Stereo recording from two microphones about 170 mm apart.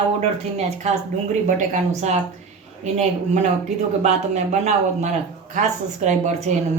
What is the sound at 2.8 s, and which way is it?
Speech, 40° right (ahead or behind).